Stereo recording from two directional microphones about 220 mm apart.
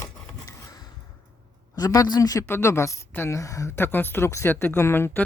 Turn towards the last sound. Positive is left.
turn(degrees=10)  # may be behind; listen again after turning